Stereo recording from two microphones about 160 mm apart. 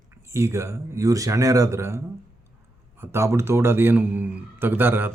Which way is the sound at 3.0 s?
15° right (ahead or behind).